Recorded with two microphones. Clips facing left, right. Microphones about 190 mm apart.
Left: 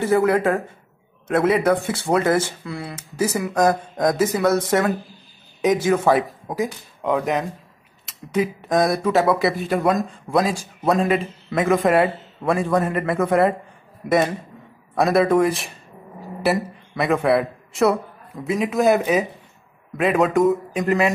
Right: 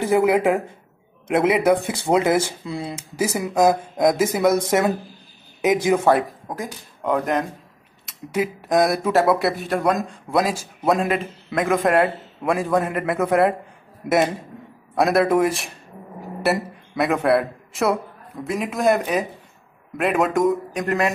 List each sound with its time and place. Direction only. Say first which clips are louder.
0.0 s speech: even; 15° right (ahead or behind)
7.0 s speech: even; centre (ahead or behind)
15.0 s a man's voice: left 1 dB; centre (ahead or behind)